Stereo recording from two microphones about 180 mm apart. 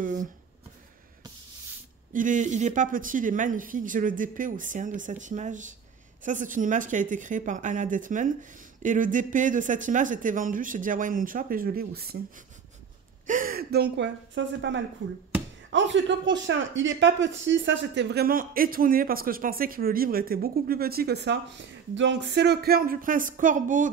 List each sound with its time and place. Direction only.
0.0 s speech: 45° right (ahead or behind)
2.1 s speech: 45° right (ahead or behind)
13.3 s speech: 50° right (ahead or behind)